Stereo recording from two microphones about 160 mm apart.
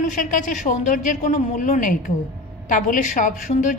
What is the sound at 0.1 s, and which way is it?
A woman's voice, 55° left (ahead or behind).